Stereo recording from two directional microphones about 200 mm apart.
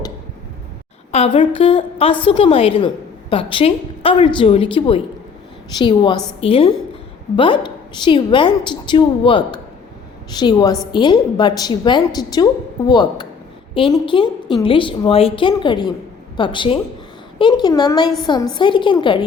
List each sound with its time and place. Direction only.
1.1 s a woman's voice: 25° left (ahead or behind)